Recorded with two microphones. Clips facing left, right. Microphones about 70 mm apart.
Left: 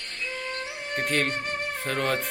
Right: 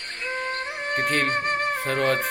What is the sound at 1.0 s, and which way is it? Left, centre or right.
Speech, centre.